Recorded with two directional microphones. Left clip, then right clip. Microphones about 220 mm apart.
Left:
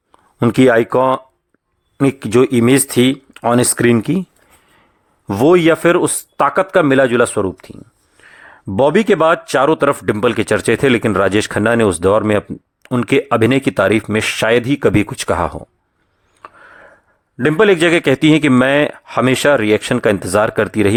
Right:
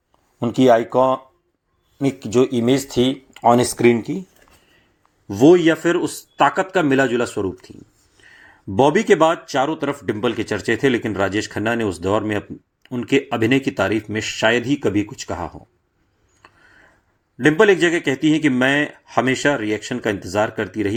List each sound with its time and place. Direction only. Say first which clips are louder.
0.3 s a man's voice: left 3 dB; 35° left (ahead or behind)
2.9 s speech: left 5 dB; 60° left (ahead or behind)
3.9 s a man's voice: left 7 dB; 40° left (ahead or behind)
5.3 s a man's voice: left 2 dB; 35° left (ahead or behind)
8.3 s a sound: left 5 dB; 30° left (ahead or behind)
9.2 s a man's voice: left 5 dB; 35° left (ahead or behind)
17.4 s a man's voice: left 3 dB; 30° left (ahead or behind)